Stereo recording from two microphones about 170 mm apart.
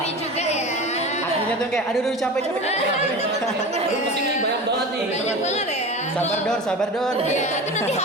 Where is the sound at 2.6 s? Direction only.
40° left (ahead or behind).